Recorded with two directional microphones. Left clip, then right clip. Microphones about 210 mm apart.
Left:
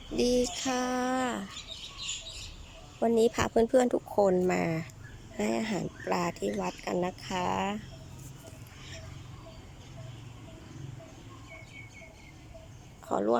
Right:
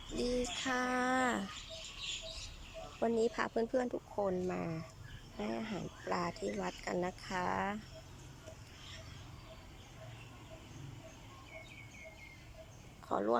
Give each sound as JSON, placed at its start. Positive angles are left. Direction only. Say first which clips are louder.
{"t": 0.2, "sound": "a sound", "louder": "left 9 dB", "side_deg": 10}
{"t": 3.0, "sound": "speech", "louder": "left 8 dB", "side_deg": 10}
{"t": 13.1, "sound": "speech", "louder": "left 6 dB", "side_deg": 10}